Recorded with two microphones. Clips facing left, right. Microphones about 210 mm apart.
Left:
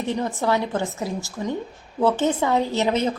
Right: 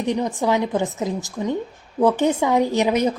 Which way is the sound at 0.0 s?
15° right (ahead or behind).